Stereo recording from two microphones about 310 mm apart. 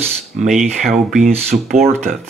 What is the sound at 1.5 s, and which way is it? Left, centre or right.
Speech, right.